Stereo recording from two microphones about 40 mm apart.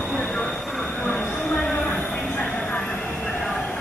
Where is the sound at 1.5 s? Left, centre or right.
Left.